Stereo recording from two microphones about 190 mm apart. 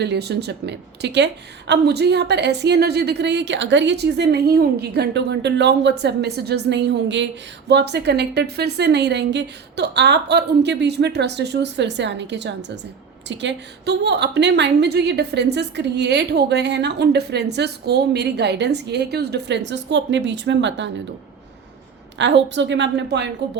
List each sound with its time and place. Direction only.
0.0 s a woman's voice: 60° right (ahead or behind)
22.2 s a woman's voice: 70° right (ahead or behind)